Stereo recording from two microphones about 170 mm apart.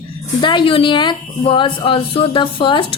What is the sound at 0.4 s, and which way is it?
A woman's voice, 30° left (ahead or behind).